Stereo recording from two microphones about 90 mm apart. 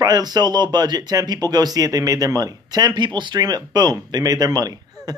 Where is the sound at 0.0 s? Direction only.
50° right (ahead or behind).